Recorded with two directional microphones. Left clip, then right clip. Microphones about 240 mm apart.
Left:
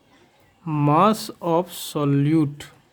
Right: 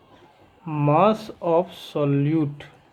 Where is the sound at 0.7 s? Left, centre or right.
Left.